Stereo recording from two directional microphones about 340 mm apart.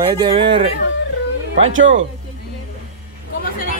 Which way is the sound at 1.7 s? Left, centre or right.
Right.